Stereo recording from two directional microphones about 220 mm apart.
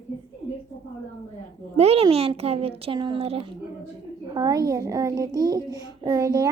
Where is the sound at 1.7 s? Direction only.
30° right (ahead or behind).